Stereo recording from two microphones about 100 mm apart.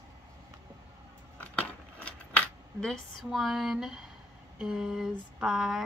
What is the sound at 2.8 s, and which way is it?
Speech, centre (ahead or behind).